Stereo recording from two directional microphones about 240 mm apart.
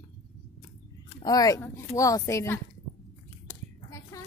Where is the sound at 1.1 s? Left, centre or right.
Centre.